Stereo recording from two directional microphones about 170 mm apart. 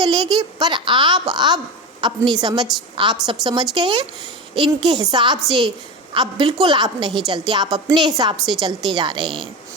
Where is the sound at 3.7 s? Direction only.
25° right (ahead or behind).